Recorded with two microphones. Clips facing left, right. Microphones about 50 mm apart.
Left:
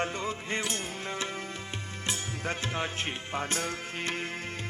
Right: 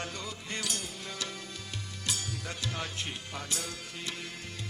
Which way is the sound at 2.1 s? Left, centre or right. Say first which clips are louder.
Left 4 dB; left.